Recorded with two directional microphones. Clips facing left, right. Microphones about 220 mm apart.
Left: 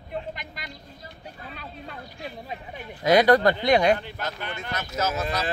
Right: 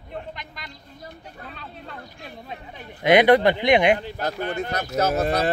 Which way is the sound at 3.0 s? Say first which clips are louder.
Right 2 dB; 20° right (ahead or behind).